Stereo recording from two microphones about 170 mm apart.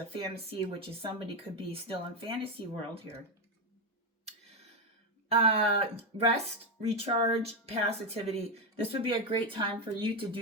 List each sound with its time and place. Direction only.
0.1 s speech: 30° right (ahead or behind)
5.3 s speech: 35° right (ahead or behind)